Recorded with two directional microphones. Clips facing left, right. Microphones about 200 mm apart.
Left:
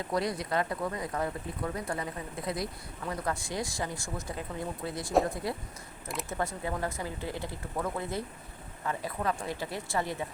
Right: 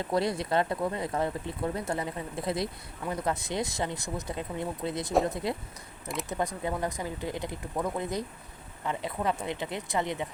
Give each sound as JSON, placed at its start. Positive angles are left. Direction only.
{"t": 0.1, "sound": "speech", "side_deg": -25}